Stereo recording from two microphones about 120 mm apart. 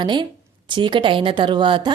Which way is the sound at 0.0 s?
40° right (ahead or behind).